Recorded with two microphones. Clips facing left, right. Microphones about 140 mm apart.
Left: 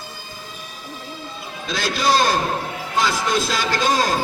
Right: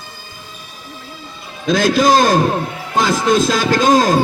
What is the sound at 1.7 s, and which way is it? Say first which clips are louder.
A man's voice: right 8 dB; 45° right (ahead or behind).